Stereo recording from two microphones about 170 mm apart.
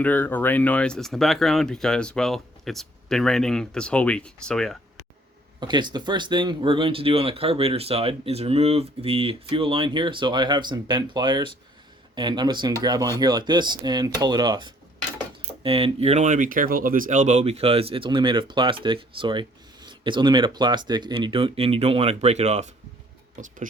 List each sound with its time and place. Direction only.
0.0 s speech: 10° left (ahead or behind)
5.5 s speech: 25° right (ahead or behind)